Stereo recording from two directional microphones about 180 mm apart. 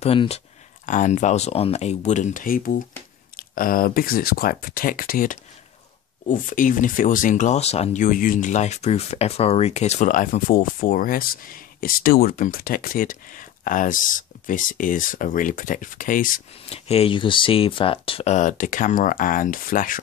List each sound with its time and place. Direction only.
0.0 s speech: 35° left (ahead or behind)
0.8 s speech: 45° left (ahead or behind)
16.6 s speech: 35° left (ahead or behind); by 20.0 s 50° left (ahead or behind)